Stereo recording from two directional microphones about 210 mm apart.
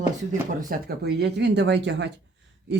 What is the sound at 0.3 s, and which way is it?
Speech, 40° right (ahead or behind).